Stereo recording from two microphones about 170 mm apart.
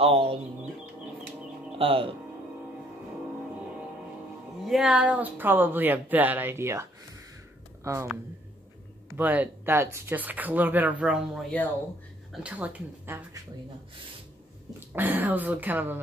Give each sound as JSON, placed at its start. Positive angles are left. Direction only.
{"t": 0.0, "sound": "speech", "side_deg": -35}
{"t": 1.8, "sound": "speech", "side_deg": -30}
{"t": 4.6, "sound": "speech", "side_deg": 0}
{"t": 9.1, "sound": "speech", "side_deg": -10}
{"t": 14.8, "sound": "speech", "side_deg": -10}